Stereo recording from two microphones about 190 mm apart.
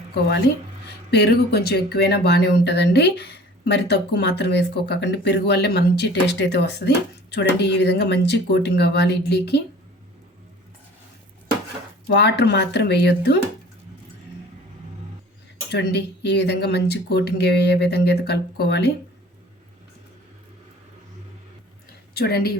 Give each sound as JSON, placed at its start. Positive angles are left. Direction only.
{"t": 0.1, "sound": "speech", "side_deg": 60}
{"t": 12.0, "sound": "speech", "side_deg": 65}
{"t": 15.7, "sound": "speech", "side_deg": 65}
{"t": 22.1, "sound": "speech", "side_deg": 55}